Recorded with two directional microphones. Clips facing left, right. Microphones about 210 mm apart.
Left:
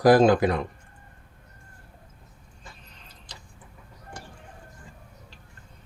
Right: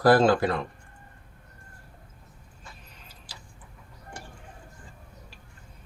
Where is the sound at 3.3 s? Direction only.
5° right (ahead or behind).